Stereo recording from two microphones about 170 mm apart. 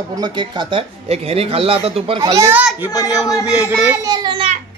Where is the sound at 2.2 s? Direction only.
20° right (ahead or behind).